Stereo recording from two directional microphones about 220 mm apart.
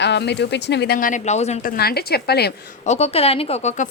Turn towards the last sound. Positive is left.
turn(degrees=30)  # may be behind; listen again after turning